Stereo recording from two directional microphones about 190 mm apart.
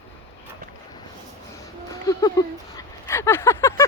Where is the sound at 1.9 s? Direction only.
20° left (ahead or behind).